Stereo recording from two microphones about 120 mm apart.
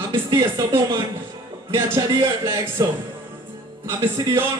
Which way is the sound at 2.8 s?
30° right (ahead or behind).